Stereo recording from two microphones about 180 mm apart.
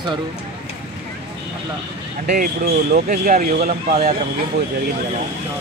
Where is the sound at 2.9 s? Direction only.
50° right (ahead or behind).